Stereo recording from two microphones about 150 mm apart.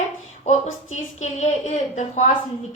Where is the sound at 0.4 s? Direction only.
50° left (ahead or behind).